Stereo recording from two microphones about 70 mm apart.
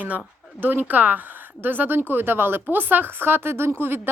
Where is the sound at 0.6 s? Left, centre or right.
Right.